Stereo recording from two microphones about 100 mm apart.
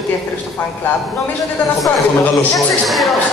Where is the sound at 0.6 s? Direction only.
20° left (ahead or behind).